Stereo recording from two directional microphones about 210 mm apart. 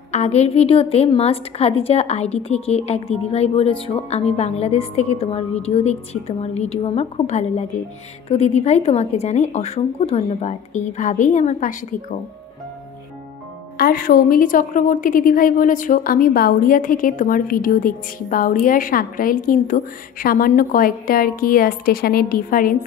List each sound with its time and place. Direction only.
0.1 s a woman's voice: 30° left (ahead or behind)
13.7 s a woman's voice: 45° left (ahead or behind)